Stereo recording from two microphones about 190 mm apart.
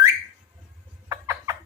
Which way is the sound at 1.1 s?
15° right (ahead or behind).